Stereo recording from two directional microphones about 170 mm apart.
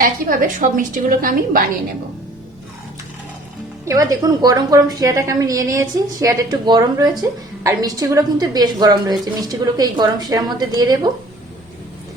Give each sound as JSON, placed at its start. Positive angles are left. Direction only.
{"t": 0.0, "sound": "a woman's voice", "side_deg": -55}
{"t": 3.8, "sound": "a woman's voice", "side_deg": -20}